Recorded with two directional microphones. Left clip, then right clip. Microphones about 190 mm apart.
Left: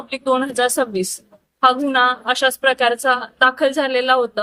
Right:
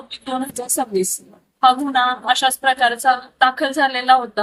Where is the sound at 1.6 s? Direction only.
30° left (ahead or behind).